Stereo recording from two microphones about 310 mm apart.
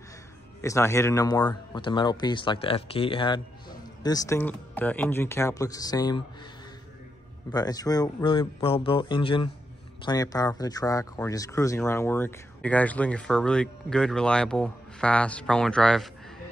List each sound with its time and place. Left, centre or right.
0.6 s speech: centre
7.5 s speech: centre